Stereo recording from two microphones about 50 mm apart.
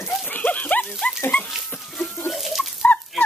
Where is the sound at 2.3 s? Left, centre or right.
Centre.